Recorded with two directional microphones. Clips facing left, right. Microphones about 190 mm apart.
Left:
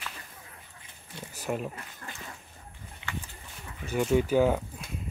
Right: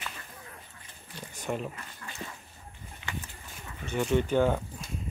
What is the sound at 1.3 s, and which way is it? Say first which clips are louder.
Speech: left 1 dB; 5° left (ahead or behind).